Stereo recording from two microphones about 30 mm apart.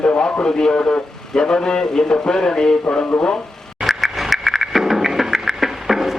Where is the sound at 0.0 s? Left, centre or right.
Left.